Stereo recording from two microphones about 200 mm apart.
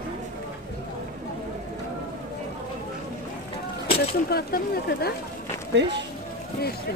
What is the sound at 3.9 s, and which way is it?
Speech, 50° left (ahead or behind).